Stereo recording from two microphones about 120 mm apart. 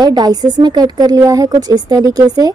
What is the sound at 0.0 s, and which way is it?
Speech, 35° right (ahead or behind).